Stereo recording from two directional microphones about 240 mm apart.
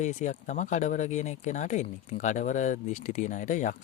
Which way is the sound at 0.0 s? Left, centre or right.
Left.